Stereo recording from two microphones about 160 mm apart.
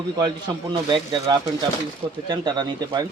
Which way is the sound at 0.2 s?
30° right (ahead or behind).